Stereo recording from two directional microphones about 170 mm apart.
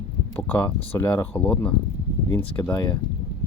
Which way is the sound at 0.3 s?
15° left (ahead or behind).